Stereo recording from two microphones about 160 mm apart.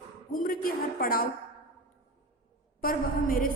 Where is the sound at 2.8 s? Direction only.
60° left (ahead or behind).